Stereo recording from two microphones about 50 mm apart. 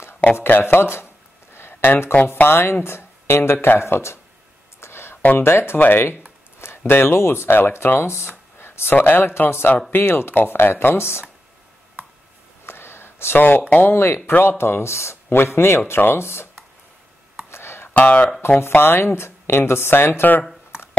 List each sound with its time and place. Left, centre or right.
0.4 s a sound: left
2.3 s speech: left
3.8 s speech: left
4.7 s a sound: left
5.4 s speech: left
8.5 s a sound: left
8.9 s speech: left
12.6 s a sound: left
13.7 s speech: left
13.9 s speech: left
17.5 s music: left
17.9 s speech: left
18.7 s speech: left